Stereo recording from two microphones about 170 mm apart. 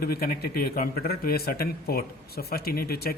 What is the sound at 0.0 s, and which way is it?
A man's voice, 60° left (ahead or behind).